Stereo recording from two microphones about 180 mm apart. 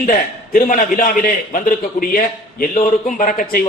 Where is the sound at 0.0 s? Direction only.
50° left (ahead or behind).